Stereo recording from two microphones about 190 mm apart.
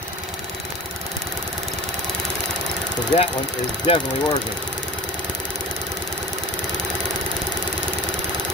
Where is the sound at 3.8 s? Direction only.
25° left (ahead or behind).